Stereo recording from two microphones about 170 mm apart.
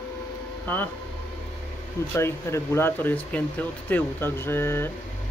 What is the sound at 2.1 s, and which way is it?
Speech, 15° left (ahead or behind).